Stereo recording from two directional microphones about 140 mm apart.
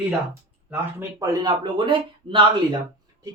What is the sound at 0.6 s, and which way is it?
Speech, 20° right (ahead or behind).